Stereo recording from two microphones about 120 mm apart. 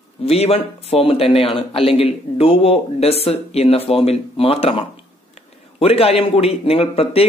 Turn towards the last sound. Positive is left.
turn(degrees=55)  # may be behind; listen again after turning